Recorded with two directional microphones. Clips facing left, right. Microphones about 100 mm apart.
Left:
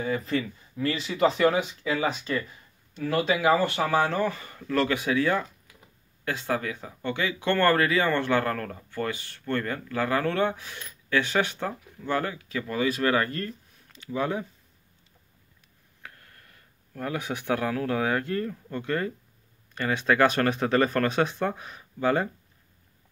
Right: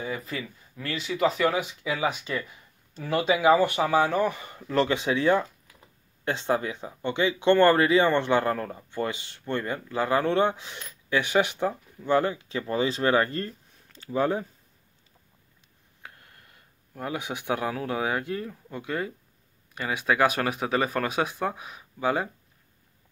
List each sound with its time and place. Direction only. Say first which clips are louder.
0.0 s speech: left 5 dB; 5° right (ahead or behind); by 14.4 s 35° right (ahead or behind)
16.0 s speech: even; 20° right (ahead or behind)